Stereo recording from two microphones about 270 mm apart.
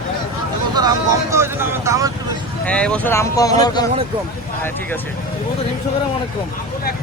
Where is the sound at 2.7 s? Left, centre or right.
Centre.